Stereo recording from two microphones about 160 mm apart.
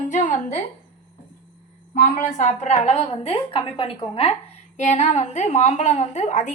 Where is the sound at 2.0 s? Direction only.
50° left (ahead or behind).